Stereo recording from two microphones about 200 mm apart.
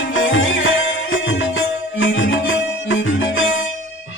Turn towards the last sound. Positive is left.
turn(degrees=75)  # may be behind; listen again after turning